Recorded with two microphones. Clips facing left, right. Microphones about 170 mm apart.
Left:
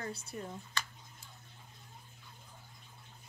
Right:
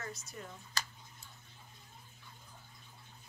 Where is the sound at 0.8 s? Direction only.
40° right (ahead or behind).